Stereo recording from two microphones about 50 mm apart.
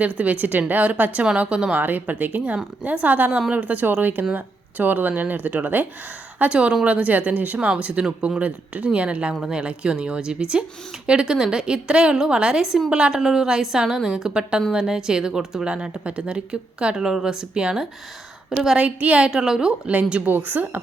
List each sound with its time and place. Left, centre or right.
0.2 s speech: right
1.2 s speech: right
1.8 s speech: right
6.4 s speech: right
8.0 s speech: centre
8.4 s speech: right; by 18.8 s centre
18.8 s speech: right
19.3 s speech: centre
19.9 s speech: right
20.2 s speech: right